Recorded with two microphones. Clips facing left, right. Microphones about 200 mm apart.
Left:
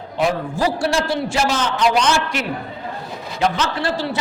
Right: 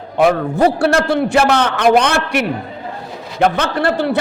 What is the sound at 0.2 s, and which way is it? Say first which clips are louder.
A man's voice: right 7 dB; 60° right (ahead or behind).